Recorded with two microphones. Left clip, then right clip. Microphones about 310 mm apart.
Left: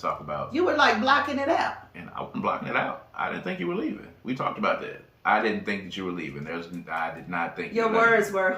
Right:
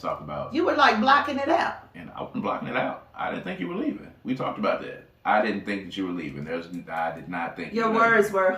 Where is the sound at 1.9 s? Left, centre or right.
Centre.